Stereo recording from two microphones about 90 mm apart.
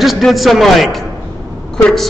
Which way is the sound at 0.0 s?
Centre (ahead or behind).